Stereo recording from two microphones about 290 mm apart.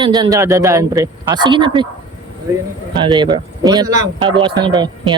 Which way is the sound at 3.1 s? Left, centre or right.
Centre.